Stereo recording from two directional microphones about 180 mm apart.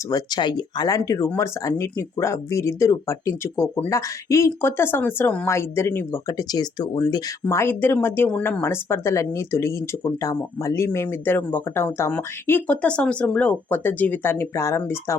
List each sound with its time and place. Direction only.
0.1 s speech: 25° left (ahead or behind)